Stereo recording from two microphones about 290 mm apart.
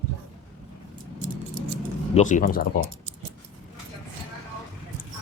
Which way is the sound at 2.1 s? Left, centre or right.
Left.